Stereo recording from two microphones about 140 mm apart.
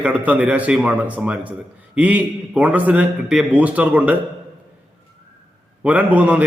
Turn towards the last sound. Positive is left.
turn(degrees=-10)  # may be behind; listen again after turning